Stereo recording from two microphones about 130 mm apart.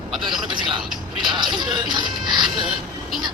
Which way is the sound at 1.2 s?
35° right (ahead or behind).